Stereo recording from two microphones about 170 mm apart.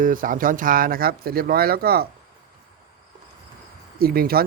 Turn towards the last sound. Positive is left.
turn(degrees=-60)  # may be behind; listen again after turning